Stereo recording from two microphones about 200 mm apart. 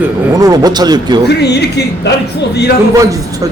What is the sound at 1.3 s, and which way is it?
Speech, 55° left (ahead or behind).